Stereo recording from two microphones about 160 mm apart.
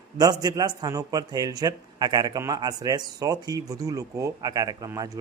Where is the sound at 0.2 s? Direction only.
25° right (ahead or behind).